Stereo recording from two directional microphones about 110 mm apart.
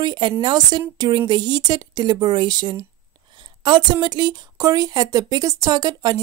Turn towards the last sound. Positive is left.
turn(degrees=-35)  # may be behind; listen again after turning